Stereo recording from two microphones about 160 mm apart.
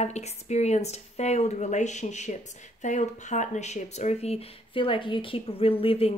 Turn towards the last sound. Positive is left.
turn(degrees=35)  # may be behind; listen again after turning